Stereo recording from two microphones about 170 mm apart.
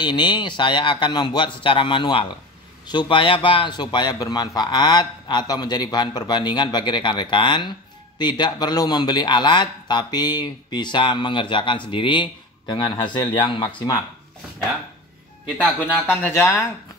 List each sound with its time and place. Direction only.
0.0 s a man's voice: 25° left (ahead or behind)
16.1 s speech: 10° left (ahead or behind)